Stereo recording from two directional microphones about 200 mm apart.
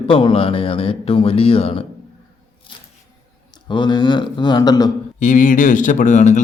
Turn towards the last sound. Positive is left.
turn(degrees=40)  # may be behind; listen again after turning